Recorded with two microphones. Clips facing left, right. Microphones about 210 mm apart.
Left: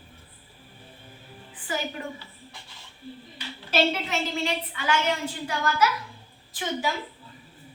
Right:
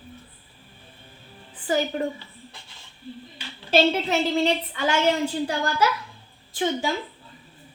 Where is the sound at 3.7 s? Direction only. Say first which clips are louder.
Right 5 dB; 35° right (ahead or behind).